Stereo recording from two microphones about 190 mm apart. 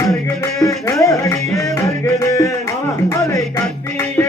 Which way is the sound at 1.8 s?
15° left (ahead or behind).